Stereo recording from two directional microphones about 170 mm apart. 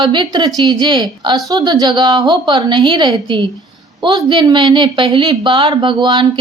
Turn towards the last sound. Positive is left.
turn(degrees=-25)  # may be behind; listen again after turning